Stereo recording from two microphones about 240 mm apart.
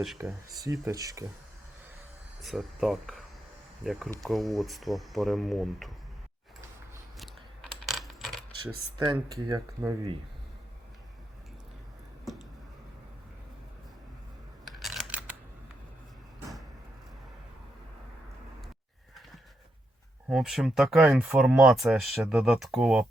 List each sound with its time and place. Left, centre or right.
0.2 s speech: centre
0.6 s speech: centre
2.4 s speech: centre
7.2 s a sound: centre
9.0 s speech: centre
14.7 s scissors: centre
20.3 s speech: centre